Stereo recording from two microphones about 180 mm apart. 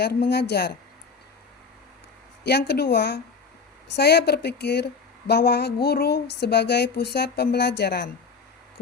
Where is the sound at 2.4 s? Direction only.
65° left (ahead or behind).